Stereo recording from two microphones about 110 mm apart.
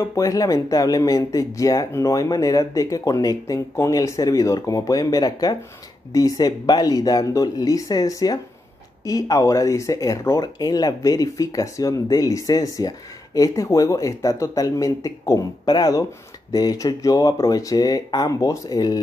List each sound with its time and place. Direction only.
0.0 s speech: 30° left (ahead or behind)